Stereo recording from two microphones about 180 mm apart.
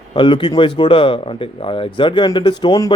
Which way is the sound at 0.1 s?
30° left (ahead or behind).